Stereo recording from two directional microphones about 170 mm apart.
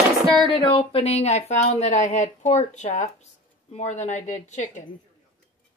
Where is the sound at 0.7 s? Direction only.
35° left (ahead or behind).